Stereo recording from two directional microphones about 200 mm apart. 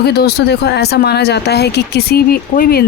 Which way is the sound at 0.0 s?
55° left (ahead or behind).